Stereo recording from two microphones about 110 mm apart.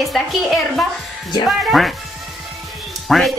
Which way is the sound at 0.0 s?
Centre (ahead or behind).